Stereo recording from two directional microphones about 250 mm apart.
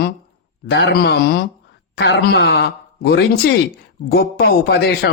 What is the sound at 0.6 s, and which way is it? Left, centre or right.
A man's voice, left.